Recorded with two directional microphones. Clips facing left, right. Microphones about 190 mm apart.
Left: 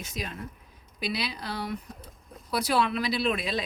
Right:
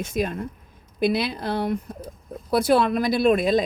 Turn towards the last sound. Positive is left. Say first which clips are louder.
# right 10 dB
turn(degrees=-45)  # may be behind; listen again after turning